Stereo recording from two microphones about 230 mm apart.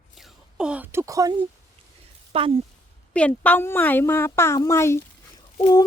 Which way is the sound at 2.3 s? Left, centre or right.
Right.